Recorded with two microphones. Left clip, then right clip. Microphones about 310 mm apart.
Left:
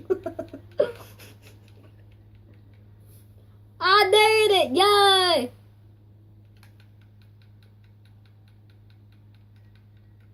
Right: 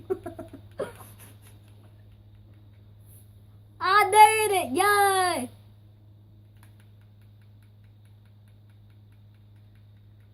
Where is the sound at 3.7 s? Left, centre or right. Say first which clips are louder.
Even; centre.